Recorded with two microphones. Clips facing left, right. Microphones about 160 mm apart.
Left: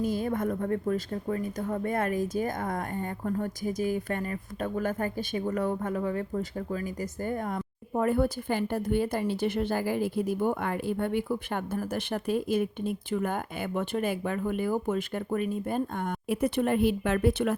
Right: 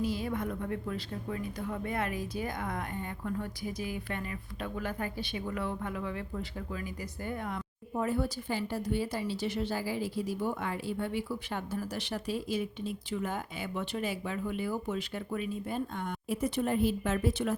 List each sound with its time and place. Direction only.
0.0 s a woman's voice: 50° left (ahead or behind)